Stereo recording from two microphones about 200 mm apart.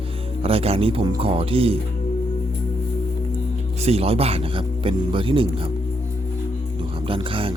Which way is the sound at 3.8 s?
30° right (ahead or behind).